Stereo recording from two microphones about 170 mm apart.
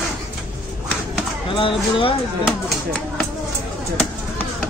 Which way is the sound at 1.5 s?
30° left (ahead or behind).